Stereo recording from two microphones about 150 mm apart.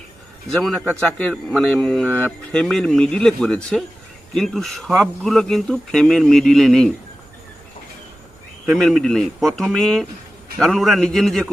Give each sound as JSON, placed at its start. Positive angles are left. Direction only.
{"t": 1.0, "sound": "a man's voice", "side_deg": 5}
{"t": 8.6, "sound": "a man's voice", "side_deg": 0}